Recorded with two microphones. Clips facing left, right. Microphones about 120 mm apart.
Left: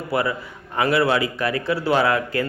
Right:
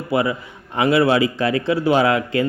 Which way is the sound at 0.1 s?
20° right (ahead or behind).